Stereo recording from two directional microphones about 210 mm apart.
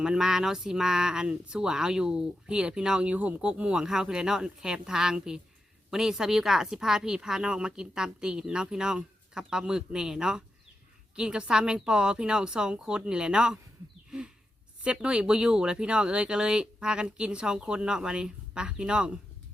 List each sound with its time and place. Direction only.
0.0 s speech: 5° right (ahead or behind)
14.8 s speech: 5° right (ahead or behind)